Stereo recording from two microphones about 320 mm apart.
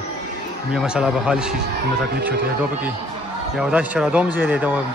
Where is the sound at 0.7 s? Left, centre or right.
Centre.